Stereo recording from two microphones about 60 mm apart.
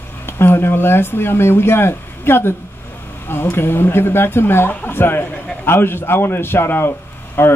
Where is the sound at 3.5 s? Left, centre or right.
Left.